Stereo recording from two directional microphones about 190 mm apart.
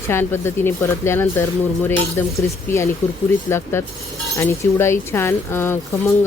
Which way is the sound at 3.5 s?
15° left (ahead or behind).